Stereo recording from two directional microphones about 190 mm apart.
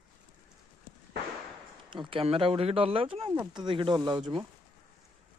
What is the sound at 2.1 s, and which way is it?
Speech, 30° right (ahead or behind).